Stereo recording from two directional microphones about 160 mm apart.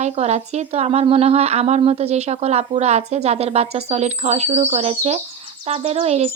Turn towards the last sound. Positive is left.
turn(degrees=-40)  # may be behind; listen again after turning